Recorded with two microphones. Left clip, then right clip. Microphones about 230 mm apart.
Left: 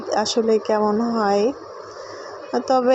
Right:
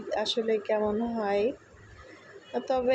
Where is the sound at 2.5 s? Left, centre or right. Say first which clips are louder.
Left 9 dB; left.